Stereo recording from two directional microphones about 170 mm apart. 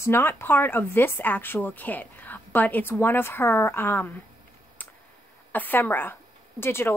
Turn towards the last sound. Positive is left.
turn(degrees=15)  # may be behind; listen again after turning